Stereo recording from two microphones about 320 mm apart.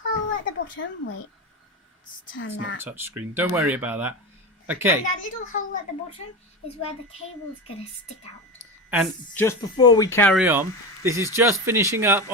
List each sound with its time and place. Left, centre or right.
0.0 s a child's voice: left
2.3 s speech: left
2.8 s speech: centre
5.0 s a child's voice: left
8.9 s speech: centre
9.4 s speech: centre